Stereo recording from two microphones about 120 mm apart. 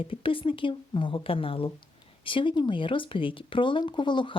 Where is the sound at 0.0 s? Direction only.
50° left (ahead or behind).